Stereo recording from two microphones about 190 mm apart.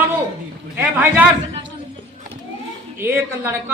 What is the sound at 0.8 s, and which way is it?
Speech, 10° right (ahead or behind).